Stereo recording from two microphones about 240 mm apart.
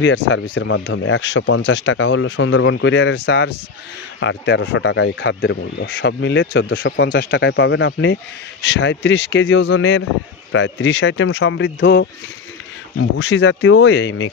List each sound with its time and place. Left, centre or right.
0.0 s speech: left
13.2 s speech: left